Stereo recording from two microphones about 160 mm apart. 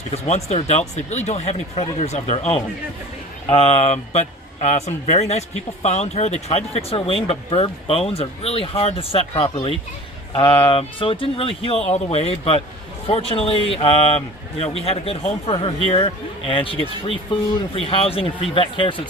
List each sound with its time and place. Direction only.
0.1 s speech: 40° left (ahead or behind)
10.7 s speech: 35° left (ahead or behind)